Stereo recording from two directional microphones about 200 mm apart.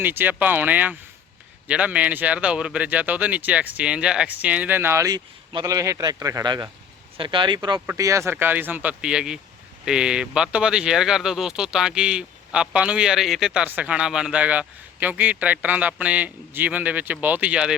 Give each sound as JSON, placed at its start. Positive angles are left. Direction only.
{"t": 0.0, "sound": "speech", "side_deg": -10}